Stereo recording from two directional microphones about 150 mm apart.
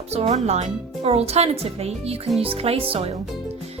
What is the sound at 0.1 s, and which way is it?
A woman's voice, 45° right (ahead or behind).